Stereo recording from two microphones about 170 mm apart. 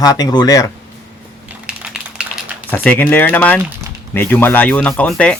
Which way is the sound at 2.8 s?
10° left (ahead or behind).